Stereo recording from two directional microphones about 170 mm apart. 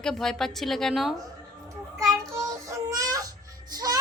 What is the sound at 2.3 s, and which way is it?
Child singing, 20° right (ahead or behind).